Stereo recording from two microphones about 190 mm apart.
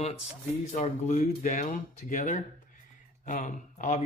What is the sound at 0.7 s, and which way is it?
A man's voice, 40° left (ahead or behind).